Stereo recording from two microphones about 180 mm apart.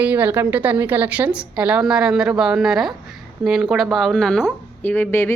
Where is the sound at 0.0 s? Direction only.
10° right (ahead or behind).